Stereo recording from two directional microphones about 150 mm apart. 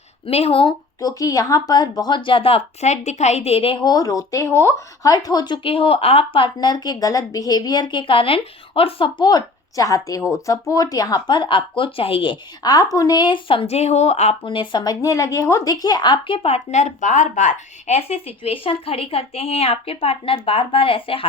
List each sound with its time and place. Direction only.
0.3 s speech: 40° left (ahead or behind)
0.9 s speech: 25° left (ahead or behind); by 14.3 s 45° left (ahead or behind)
14.4 s speech: 35° left (ahead or behind)